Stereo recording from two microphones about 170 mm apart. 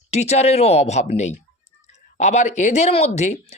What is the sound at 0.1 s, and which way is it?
Speech, 40° left (ahead or behind).